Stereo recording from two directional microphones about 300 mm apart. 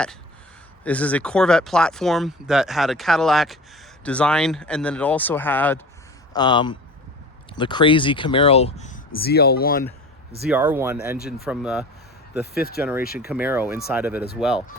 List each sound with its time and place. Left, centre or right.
0.9 s speech: centre; by 9.8 s left
10.4 s speech: centre
12.5 s speech: left
13.3 s speech: centre